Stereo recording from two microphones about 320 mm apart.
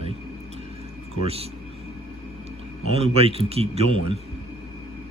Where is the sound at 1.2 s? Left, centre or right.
Centre.